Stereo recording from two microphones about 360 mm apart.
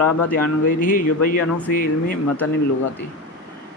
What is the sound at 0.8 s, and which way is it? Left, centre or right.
Speech, left.